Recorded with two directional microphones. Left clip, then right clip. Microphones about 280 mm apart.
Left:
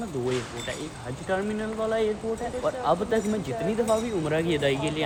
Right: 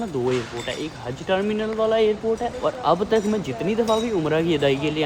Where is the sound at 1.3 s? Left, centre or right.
Centre.